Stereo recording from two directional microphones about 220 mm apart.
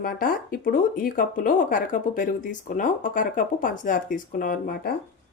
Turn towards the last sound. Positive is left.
turn(degrees=45)  # may be behind; listen again after turning